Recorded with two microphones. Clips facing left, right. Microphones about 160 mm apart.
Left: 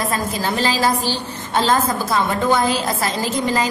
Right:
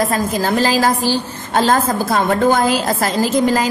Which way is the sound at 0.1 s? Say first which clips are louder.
Right 5 dB; 45° right (ahead or behind).